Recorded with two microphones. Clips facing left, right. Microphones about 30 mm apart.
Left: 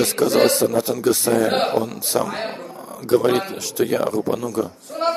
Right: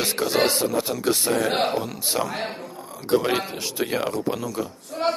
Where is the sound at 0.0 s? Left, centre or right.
Centre.